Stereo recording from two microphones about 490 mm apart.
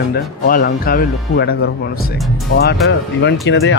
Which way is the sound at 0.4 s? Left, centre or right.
Centre.